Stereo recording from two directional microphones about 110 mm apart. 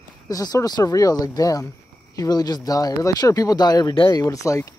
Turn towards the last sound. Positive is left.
turn(degrees=30)  # may be behind; listen again after turning